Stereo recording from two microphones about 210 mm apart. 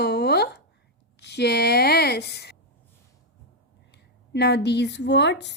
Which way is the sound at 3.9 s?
55° left (ahead or behind).